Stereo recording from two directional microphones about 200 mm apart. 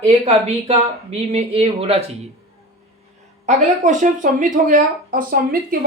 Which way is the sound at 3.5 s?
40° right (ahead or behind).